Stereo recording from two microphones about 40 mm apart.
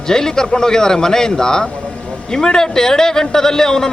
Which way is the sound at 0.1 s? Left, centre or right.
Centre.